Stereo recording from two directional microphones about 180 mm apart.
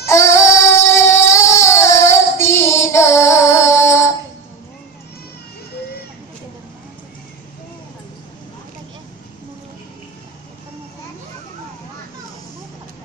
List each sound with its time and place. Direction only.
0.0 s child singing: 15° left (ahead or behind)